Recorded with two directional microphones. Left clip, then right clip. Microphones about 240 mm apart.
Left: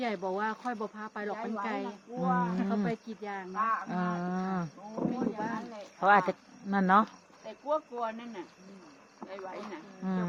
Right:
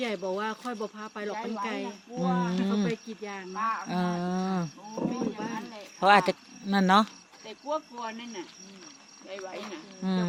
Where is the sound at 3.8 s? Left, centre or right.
Right.